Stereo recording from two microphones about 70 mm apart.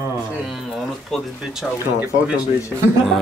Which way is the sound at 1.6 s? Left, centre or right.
Centre.